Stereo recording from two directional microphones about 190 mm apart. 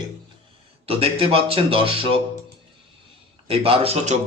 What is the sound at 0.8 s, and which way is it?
A man's voice, 30° right (ahead or behind).